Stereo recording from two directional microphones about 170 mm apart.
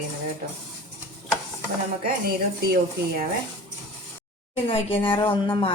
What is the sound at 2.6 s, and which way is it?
Speech, 60° right (ahead or behind).